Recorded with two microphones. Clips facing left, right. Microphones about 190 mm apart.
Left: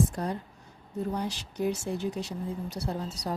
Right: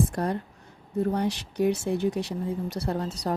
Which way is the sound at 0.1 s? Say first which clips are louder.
Right 5 dB; 60° right (ahead or behind).